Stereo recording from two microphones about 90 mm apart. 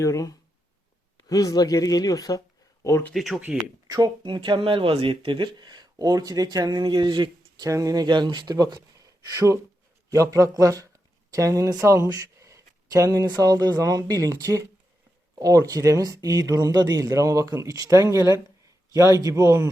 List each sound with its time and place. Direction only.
0.0 s speech: 35° left (ahead or behind)
3.1 s speech: centre (ahead or behind)
3.8 s speech: 45° right (ahead or behind)
4.2 s speech: 65° right (ahead or behind)
7.6 s speech: 40° right (ahead or behind)